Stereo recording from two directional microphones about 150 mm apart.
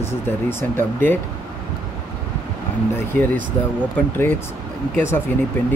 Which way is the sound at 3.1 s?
10° left (ahead or behind).